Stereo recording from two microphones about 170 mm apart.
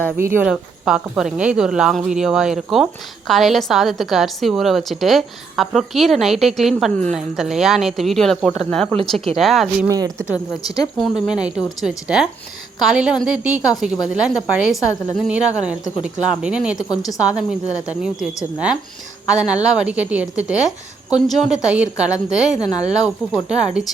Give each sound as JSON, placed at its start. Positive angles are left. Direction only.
{"t": 0.2, "sound": "a woman's voice", "side_deg": -15}
{"t": 0.4, "sound": "a woman's voice", "side_deg": -5}
{"t": 9.8, "sound": "speech", "side_deg": -20}
{"t": 10.2, "sound": "speech", "side_deg": 20}
{"t": 10.9, "sound": "a woman's voice", "side_deg": 0}
{"t": 16.7, "sound": "a woman's voice", "side_deg": 20}
{"t": 17.1, "sound": "a woman's voice", "side_deg": -5}
{"t": 19.6, "sound": "a woman's voice", "side_deg": -5}
{"t": 22.5, "sound": "a woman's voice", "side_deg": 20}
{"t": 22.9, "sound": "a woman's voice", "side_deg": -5}